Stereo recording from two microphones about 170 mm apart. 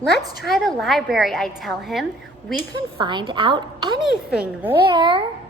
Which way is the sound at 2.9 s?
30° right (ahead or behind).